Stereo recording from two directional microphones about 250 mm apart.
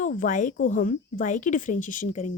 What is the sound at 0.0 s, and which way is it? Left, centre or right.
A woman's voice, left.